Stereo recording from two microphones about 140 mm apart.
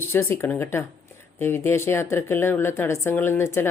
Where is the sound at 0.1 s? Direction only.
20° left (ahead or behind).